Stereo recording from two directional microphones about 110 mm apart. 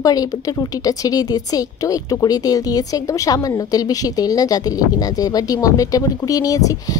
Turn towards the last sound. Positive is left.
turn(degrees=30)  # may be behind; listen again after turning